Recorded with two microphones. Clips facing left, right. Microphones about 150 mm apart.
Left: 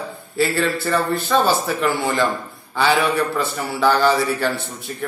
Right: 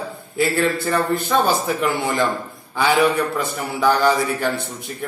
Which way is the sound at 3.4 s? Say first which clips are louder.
Left 1 dB; 15° right (ahead or behind).